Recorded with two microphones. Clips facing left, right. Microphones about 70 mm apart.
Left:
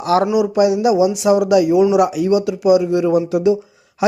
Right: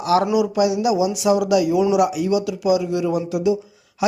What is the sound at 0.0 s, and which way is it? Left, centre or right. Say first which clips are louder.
Speech: left 2 dB; left.